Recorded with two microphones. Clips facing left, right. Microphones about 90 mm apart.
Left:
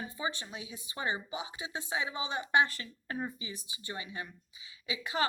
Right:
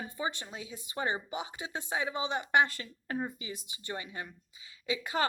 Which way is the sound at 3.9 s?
40° right (ahead or behind).